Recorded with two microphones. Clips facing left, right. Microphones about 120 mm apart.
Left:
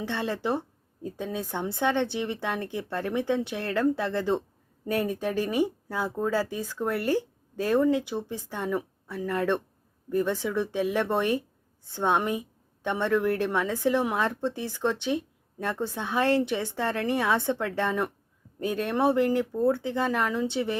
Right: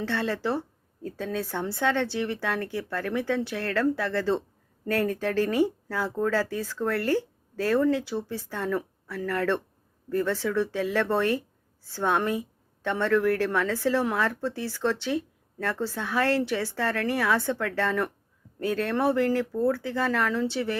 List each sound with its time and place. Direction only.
0.0 s speech: 15° left (ahead or behind)